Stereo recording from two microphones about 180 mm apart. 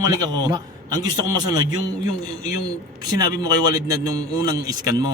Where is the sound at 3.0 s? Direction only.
20° right (ahead or behind).